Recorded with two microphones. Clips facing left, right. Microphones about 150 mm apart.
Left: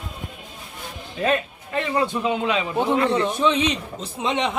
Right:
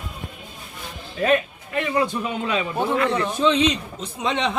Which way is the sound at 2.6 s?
20° left (ahead or behind).